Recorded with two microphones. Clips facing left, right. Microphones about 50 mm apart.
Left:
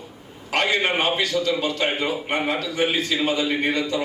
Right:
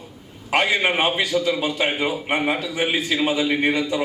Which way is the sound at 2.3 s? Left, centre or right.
Centre.